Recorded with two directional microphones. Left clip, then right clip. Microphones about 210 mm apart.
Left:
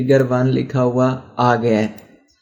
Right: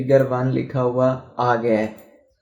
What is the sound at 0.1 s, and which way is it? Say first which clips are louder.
Speech: left 2 dB; 50° left (ahead or behind).